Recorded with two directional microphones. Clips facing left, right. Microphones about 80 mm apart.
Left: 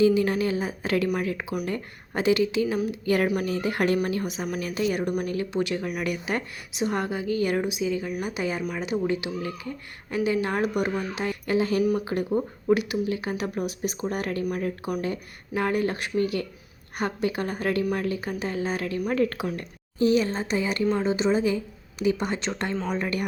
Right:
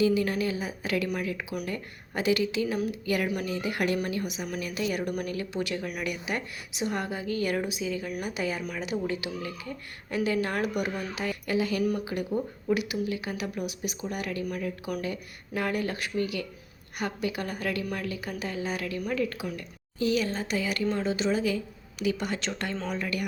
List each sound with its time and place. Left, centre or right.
0.0 s a woman's voice: left
15.0 s a woman's voice: left
20.0 s a woman's voice: left